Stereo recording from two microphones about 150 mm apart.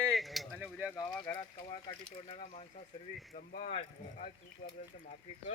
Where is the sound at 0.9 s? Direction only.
25° left (ahead or behind).